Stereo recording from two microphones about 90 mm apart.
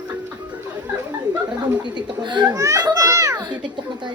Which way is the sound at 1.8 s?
55° right (ahead or behind).